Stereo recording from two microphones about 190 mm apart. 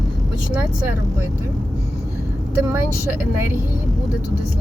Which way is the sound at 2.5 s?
15° right (ahead or behind).